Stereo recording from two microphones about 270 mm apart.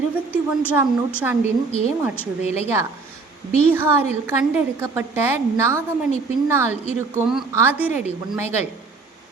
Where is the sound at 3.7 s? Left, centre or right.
Centre.